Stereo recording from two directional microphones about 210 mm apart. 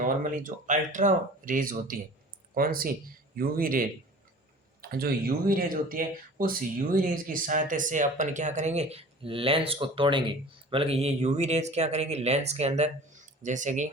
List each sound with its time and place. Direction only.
0.3 s a man's voice: 40° right (ahead or behind)